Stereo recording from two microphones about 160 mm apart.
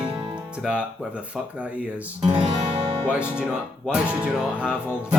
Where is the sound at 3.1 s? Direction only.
5° right (ahead or behind).